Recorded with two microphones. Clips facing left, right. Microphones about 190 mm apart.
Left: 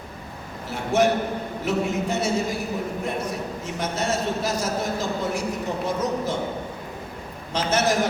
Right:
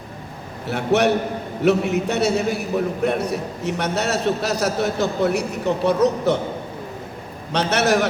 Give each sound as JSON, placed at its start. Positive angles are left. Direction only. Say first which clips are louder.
{"t": 0.7, "sound": "a man's voice", "louder": "right 3 dB", "side_deg": -70}
{"t": 7.5, "sound": "a man's voice", "louder": "right 4 dB", "side_deg": -70}